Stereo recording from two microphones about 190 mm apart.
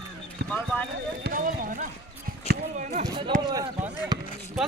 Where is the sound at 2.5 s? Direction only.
55° right (ahead or behind).